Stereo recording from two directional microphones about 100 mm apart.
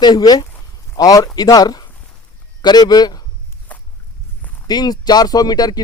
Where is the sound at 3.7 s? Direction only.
15° left (ahead or behind).